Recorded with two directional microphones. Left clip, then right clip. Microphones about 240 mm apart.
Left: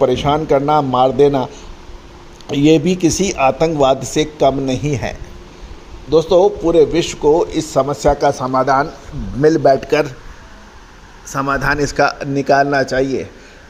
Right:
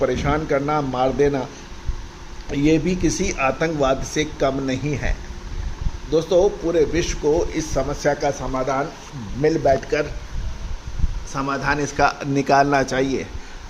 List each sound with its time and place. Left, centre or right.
0.0 s a man's voice: left
2.6 s a man's voice: left
11.3 s a man's voice: left; by 12.3 s centre
12.3 s a man's voice: centre